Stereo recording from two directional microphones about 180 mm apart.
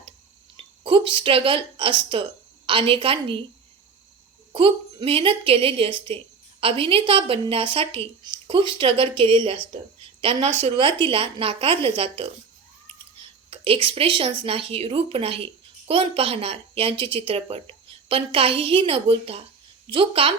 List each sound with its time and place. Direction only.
0.5 s a woman's voice: 30° right (ahead or behind)
4.5 s a woman's voice: 30° right (ahead or behind)
13.5 s a woman's voice: 30° right (ahead or behind)